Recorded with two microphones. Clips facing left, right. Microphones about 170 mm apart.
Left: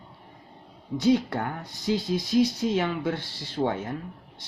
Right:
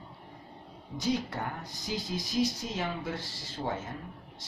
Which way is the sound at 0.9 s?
65° left (ahead or behind).